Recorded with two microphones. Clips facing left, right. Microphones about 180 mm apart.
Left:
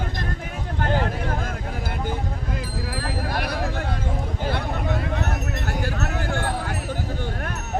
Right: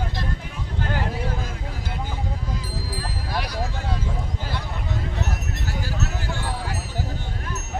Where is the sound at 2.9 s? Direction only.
55° left (ahead or behind).